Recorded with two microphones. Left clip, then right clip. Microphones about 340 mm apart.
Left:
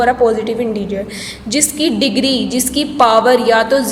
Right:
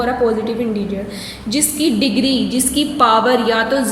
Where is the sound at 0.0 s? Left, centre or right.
Centre.